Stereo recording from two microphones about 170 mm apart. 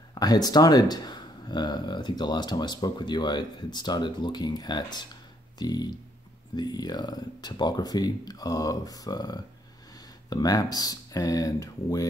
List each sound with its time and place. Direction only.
0.1 s speech: 25° left (ahead or behind)